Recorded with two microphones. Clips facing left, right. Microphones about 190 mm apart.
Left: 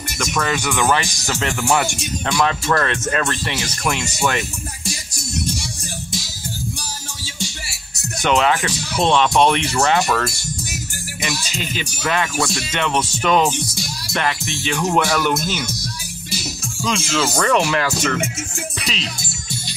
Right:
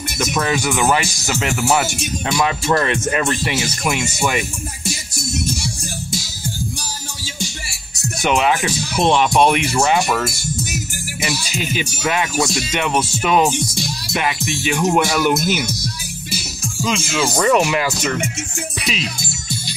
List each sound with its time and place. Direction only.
0.3 s speech: 10° right (ahead or behind)
2.3 s speech: 15° right (ahead or behind)
8.2 s speech: 10° right (ahead or behind)
12.0 s music: 20° right (ahead or behind)
12.7 s speech: 10° right (ahead or behind)
16.8 s speech: 5° right (ahead or behind)